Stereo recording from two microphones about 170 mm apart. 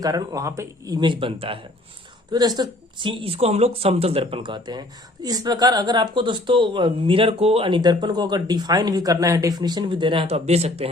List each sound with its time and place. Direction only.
0.0 s speech: 20° right (ahead or behind)